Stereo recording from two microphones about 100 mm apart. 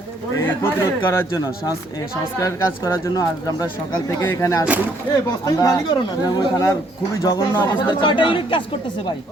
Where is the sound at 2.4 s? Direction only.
25° left (ahead or behind).